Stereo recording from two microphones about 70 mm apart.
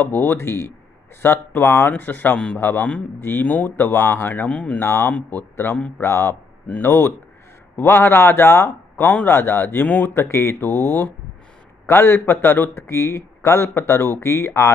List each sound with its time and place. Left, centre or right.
0.0 s speech: left
2.3 s speech: centre
4.7 s speech: left
10.1 s speech: left
12.8 s speech: left